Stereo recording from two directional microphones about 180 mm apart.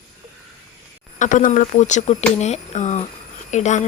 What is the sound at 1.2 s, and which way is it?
Speech, 45° left (ahead or behind).